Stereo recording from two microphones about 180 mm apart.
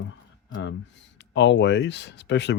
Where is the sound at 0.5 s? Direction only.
90° left.